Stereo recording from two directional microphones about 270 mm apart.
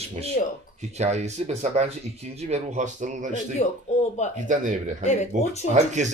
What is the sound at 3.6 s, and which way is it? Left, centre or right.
Speech, left.